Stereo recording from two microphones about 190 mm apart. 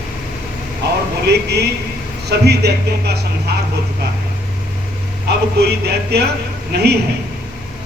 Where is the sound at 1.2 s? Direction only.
60° right (ahead or behind).